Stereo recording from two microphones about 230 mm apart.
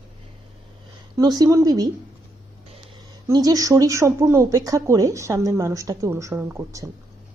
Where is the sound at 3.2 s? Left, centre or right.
Centre.